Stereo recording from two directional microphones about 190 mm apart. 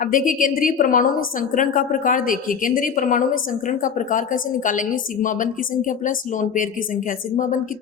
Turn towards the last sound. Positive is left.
turn(degrees=45)  # may be behind; listen again after turning